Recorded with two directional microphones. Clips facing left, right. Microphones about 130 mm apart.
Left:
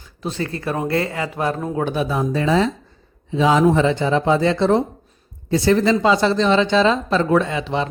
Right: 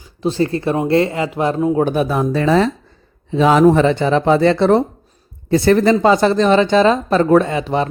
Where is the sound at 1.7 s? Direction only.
45° right (ahead or behind).